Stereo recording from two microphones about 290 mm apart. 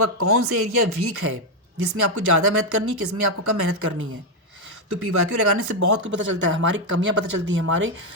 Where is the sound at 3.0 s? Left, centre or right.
Right.